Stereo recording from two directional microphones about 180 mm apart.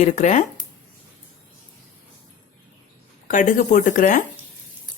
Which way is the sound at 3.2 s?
45° left (ahead or behind).